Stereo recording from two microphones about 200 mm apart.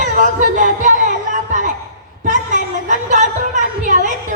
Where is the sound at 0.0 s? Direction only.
40° right (ahead or behind).